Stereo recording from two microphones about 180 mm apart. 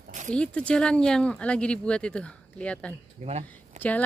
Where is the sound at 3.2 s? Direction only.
35° right (ahead or behind).